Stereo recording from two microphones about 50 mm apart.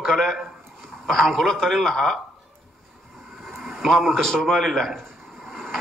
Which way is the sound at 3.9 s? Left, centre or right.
Centre.